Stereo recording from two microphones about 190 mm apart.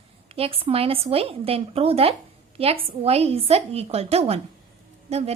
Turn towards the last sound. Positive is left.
turn(degrees=-35)  # may be behind; listen again after turning